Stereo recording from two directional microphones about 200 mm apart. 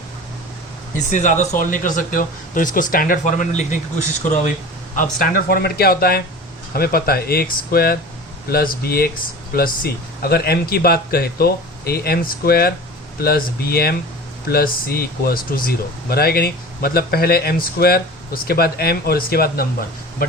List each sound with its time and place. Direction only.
1.1 s speech: 40° left (ahead or behind)
4.9 s speech: 40° left (ahead or behind)